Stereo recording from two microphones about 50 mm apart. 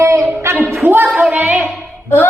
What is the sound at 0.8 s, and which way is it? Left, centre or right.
Speech, right.